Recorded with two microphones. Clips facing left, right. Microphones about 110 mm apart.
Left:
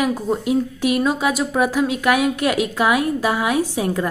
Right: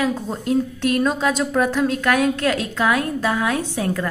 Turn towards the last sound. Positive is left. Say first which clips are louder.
# left 3 dB
turn(degrees=15)  # may be behind; listen again after turning